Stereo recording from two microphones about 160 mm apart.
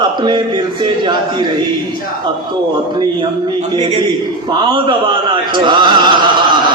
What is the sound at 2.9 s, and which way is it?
A man's voice, 25° right (ahead or behind).